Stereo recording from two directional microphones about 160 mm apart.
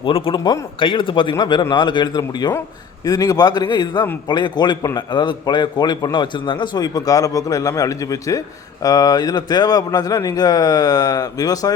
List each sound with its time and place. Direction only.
0.0 s a man's voice: 35° left (ahead or behind)